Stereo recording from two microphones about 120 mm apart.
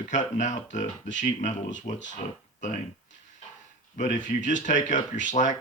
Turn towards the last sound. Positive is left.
turn(degrees=90)